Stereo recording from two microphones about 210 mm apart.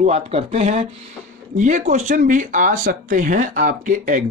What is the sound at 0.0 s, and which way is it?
Speech, 30° right (ahead or behind).